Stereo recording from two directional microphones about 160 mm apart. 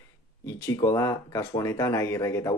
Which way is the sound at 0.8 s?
20° left (ahead or behind).